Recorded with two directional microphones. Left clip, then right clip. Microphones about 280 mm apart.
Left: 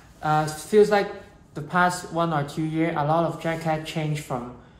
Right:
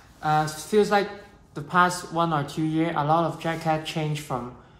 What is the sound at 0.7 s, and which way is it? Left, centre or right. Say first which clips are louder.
Speech: left 3 dB; centre.